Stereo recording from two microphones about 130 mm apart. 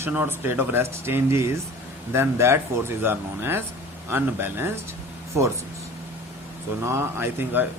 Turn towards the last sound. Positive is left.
turn(degrees=-20)  # may be behind; listen again after turning